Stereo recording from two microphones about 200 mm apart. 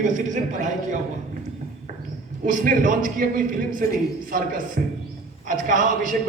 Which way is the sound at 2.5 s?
45° right (ahead or behind).